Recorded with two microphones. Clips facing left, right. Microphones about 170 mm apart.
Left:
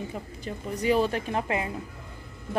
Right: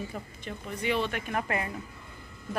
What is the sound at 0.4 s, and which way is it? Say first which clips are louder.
Speech: left 5 dB; 35° left (ahead or behind).